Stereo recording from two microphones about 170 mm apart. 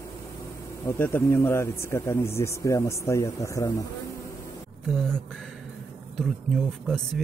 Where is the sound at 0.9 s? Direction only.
15° left (ahead or behind).